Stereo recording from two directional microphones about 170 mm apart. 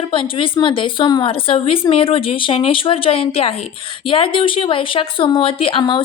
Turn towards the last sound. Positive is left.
turn(degrees=30)  # may be behind; listen again after turning